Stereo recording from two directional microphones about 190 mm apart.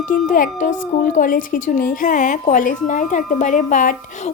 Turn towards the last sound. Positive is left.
turn(degrees=40)  # may be behind; listen again after turning